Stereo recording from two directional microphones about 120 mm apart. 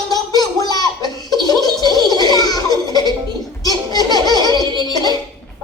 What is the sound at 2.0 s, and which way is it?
Baby laughter, 35° left (ahead or behind).